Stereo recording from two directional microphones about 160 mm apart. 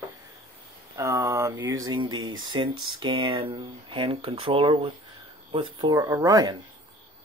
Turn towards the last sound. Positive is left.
turn(degrees=-20)  # may be behind; listen again after turning